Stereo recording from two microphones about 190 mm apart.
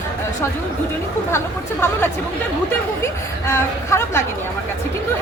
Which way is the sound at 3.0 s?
15° left (ahead or behind).